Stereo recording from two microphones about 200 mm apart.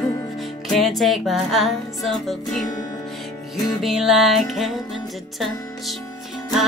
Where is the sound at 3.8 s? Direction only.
Centre (ahead or behind).